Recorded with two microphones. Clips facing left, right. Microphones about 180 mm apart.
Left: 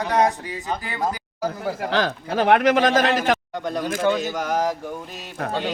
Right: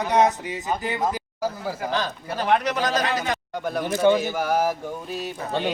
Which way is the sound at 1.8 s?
80° left.